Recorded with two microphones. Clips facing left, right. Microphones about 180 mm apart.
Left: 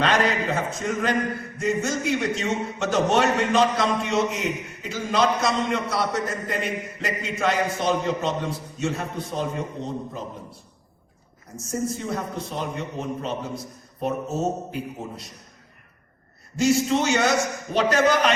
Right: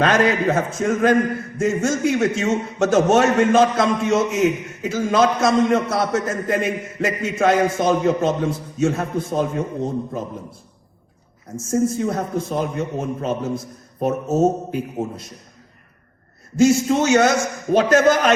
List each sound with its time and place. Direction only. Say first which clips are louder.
0.0 s a man's voice: right 5 dB; 50° right (ahead or behind)
11.5 s a man's voice: right 8 dB; 50° right (ahead or behind)
16.6 s a man's voice: right 5 dB; 50° right (ahead or behind)